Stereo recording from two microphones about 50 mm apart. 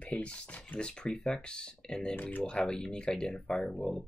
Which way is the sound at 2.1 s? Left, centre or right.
Left.